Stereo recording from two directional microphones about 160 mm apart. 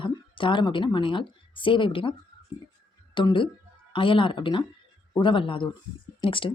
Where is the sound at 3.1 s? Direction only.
30° left (ahead or behind).